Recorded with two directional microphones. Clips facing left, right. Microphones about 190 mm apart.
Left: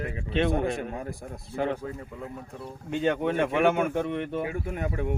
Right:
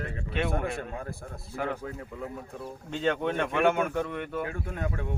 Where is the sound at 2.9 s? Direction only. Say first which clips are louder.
Left 2 dB; 10° left (ahead or behind).